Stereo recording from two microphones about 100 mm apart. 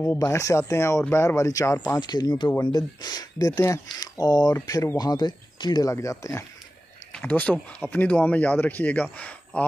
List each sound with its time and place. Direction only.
0.2 s speech: 35° left (ahead or behind)
4.6 s speech: 30° left (ahead or behind)
7.1 s speech: 15° left (ahead or behind)